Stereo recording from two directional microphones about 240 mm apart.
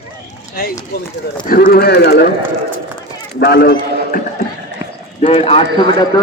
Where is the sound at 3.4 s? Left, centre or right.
Left.